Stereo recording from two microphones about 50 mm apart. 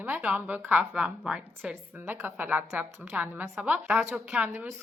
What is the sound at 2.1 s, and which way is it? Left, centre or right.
A woman's voice, right.